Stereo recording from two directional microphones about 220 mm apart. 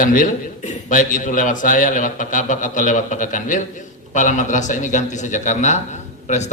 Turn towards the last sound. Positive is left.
turn(degrees=30)  # may be behind; listen again after turning